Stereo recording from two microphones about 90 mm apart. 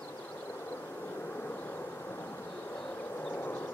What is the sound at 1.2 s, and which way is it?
Vehicle, 20° left (ahead or behind).